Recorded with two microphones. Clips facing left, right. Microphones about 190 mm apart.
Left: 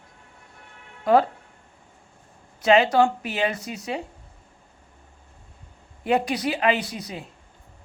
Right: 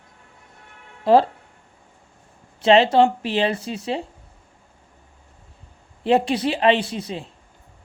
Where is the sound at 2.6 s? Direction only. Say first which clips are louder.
Right 3 dB; 30° right (ahead or behind).